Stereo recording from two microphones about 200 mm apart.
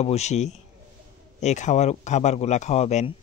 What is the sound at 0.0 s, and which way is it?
A man's voice, 35° left (ahead or behind).